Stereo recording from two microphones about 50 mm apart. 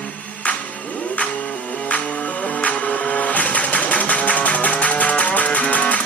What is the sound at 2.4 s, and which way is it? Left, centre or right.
Vehicle, left.